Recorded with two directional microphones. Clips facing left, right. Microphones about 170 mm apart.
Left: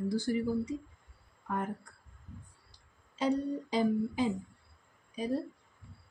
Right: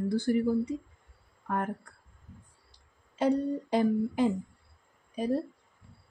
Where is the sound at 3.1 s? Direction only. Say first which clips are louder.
Right 4 dB; 60° right (ahead or behind).